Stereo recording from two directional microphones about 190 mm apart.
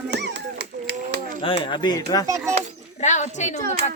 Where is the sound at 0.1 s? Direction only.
65° right (ahead or behind).